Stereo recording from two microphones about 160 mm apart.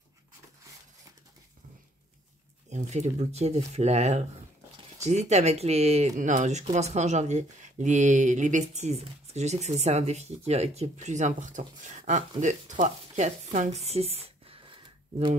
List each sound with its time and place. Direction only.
2.7 s speech: 45° right (ahead or behind)